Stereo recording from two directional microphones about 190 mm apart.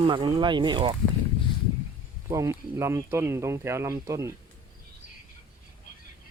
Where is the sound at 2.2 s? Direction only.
15° right (ahead or behind).